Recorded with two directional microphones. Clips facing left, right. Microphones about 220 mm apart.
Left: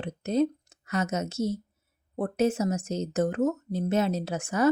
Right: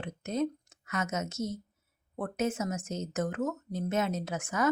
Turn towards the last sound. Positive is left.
turn(degrees=30)  # may be behind; listen again after turning